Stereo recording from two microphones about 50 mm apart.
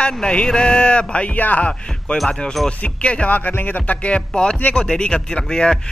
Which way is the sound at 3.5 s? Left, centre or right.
Left.